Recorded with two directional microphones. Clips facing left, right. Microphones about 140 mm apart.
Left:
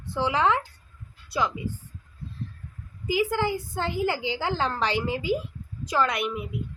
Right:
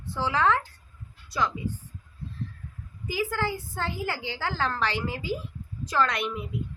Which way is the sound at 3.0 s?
15° left (ahead or behind).